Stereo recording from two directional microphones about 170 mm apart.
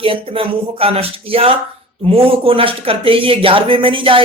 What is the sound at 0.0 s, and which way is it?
Speech, 30° right (ahead or behind).